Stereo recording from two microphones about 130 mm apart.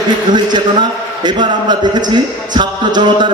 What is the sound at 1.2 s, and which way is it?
A man's voice, 35° right (ahead or behind).